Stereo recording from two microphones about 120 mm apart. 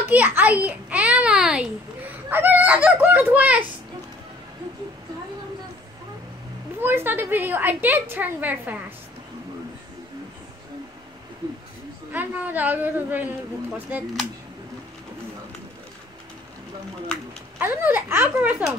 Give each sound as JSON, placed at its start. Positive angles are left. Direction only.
{"t": 0.1, "sound": "a child's voice", "side_deg": -15}
{"t": 6.8, "sound": "a woman's voice", "side_deg": -20}
{"t": 12.1, "sound": "a woman's voice", "side_deg": -15}
{"t": 17.6, "sound": "a woman's voice", "side_deg": -15}